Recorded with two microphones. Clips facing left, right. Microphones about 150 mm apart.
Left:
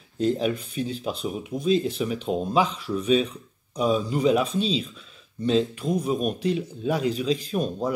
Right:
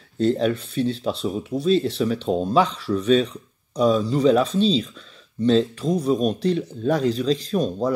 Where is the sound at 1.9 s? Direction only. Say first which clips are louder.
Right 5 dB; 10° left (ahead or behind).